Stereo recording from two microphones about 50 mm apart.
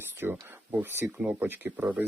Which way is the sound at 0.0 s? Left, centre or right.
Right.